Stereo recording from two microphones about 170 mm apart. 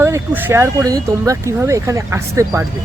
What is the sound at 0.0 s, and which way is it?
Speech, 15° right (ahead or behind).